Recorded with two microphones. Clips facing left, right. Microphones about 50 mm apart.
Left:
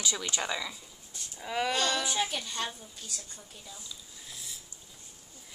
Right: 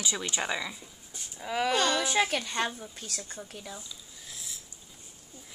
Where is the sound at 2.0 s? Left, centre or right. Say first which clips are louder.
Right 5 dB; right.